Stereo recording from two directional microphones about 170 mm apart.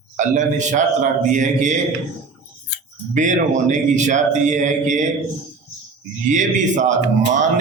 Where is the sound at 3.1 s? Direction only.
45° right (ahead or behind).